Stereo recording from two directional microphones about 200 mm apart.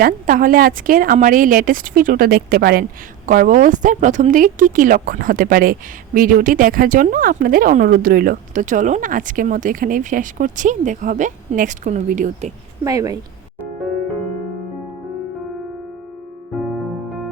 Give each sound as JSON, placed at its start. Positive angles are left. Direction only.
{"t": 0.0, "sound": "a woman's voice", "side_deg": -45}
{"t": 12.8, "sound": "a woman's voice", "side_deg": -15}